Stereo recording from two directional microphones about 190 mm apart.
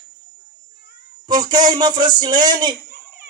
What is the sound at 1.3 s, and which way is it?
Speech, 20° right (ahead or behind).